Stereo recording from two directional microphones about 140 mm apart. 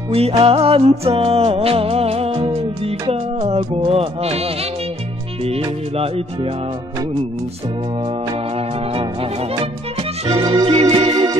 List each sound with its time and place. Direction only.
0.1 s music: 45° right (ahead or behind)
8.0 s music: 40° right (ahead or behind)